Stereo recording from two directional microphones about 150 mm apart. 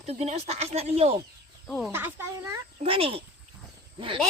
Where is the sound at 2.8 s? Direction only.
40° right (ahead or behind).